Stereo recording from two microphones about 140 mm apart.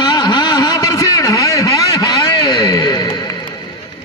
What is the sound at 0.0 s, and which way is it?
Vehicle, 30° left (ahead or behind).